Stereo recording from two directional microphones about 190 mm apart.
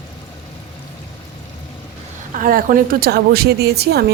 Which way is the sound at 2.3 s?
45° right (ahead or behind).